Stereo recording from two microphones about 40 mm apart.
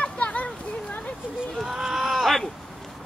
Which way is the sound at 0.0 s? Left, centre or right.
Left.